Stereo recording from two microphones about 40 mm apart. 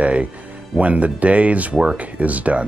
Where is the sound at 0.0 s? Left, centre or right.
Right.